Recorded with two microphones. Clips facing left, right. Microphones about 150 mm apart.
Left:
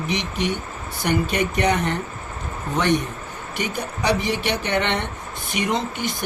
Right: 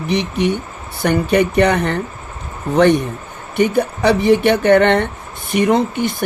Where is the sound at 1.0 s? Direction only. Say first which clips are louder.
Right 7 dB; 60° right (ahead or behind).